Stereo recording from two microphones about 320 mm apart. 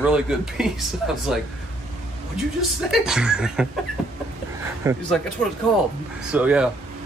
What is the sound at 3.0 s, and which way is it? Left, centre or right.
Speech, centre.